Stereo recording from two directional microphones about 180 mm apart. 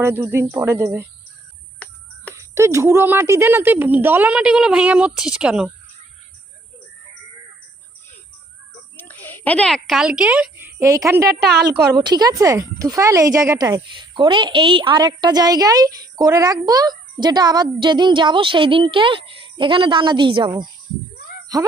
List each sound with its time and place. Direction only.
0.0 s a woman's voice: 15° right (ahead or behind)
2.3 s a woman's voice: 15° right (ahead or behind)
9.0 s a woman's voice: 10° left (ahead or behind); by 11.3 s 15° right (ahead or behind)
11.3 s a woman's voice: 65° right (ahead or behind)
11.9 s speech: 20° right (ahead or behind)